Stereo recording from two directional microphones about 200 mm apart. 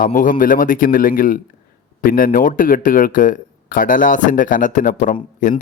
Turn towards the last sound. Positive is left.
turn(degrees=40)  # may be behind; listen again after turning